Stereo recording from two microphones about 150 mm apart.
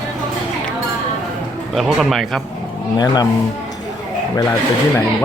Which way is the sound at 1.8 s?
Centre (ahead or behind).